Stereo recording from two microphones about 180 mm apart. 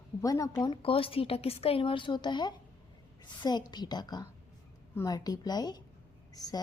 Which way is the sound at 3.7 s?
25° left (ahead or behind).